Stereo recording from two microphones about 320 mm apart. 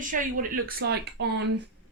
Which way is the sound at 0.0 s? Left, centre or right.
Right.